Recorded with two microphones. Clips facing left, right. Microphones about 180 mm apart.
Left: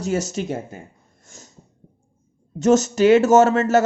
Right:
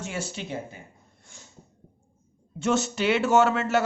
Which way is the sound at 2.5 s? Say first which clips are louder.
Left 9 dB; 40° left (ahead or behind).